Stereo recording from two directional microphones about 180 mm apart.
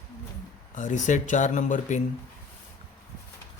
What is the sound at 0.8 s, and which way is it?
Speech, 40° left (ahead or behind).